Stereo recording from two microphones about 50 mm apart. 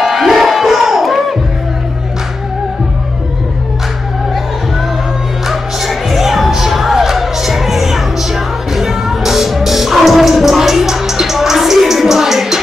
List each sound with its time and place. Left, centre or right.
0.0 s crowd: centre
5.5 s music: centre